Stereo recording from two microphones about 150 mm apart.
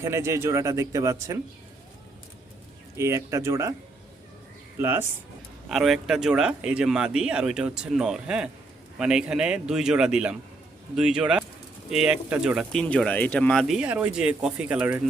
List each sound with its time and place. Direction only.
0.0 s a man's voice: 20° right (ahead or behind)
3.0 s a man's voice: 20° right (ahead or behind)
4.8 s speech: 15° right (ahead or behind)
5.6 s speech: centre (ahead or behind)
12.7 s speech: 5° left (ahead or behind)